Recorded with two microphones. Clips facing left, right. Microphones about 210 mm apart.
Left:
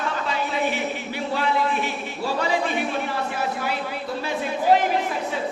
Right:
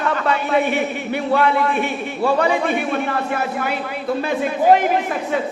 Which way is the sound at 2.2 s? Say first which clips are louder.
Right 6 dB; 55° right (ahead or behind).